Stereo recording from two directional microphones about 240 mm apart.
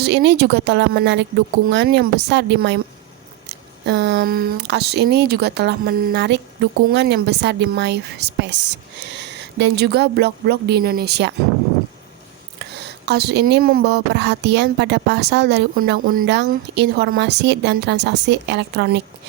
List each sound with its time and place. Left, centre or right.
0.0 s speech: right
3.8 s speech: right
13.1 s speech: right